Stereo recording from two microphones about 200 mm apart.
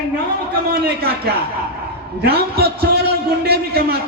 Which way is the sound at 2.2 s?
50° right (ahead or behind).